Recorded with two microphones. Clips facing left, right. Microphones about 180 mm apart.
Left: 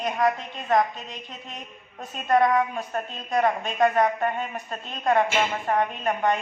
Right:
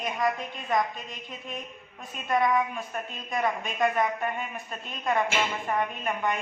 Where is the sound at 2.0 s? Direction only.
45° left (ahead or behind).